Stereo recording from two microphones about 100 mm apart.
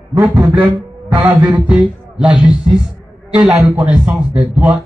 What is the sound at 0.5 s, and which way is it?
A man's voice, 15° right (ahead or behind).